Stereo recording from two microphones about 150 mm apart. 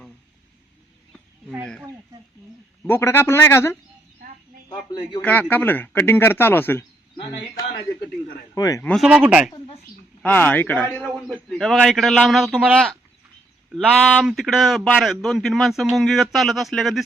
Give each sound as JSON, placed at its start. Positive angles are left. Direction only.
{"t": 2.8, "sound": "speech", "side_deg": 15}
{"t": 4.7, "sound": "a sound", "side_deg": 30}
{"t": 5.2, "sound": "speech", "side_deg": 10}
{"t": 8.5, "sound": "a man's voice", "side_deg": 25}
{"t": 8.8, "sound": "speech", "side_deg": 5}
{"t": 9.0, "sound": "speech", "side_deg": -10}
{"t": 10.2, "sound": "speech", "side_deg": 10}
{"t": 11.3, "sound": "a man's voice", "side_deg": 0}